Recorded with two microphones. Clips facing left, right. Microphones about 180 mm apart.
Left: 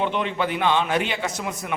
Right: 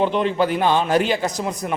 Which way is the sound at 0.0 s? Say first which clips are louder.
Right 5 dB; 35° right (ahead or behind).